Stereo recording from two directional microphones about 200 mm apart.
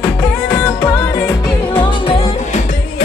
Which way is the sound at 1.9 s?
30° left (ahead or behind).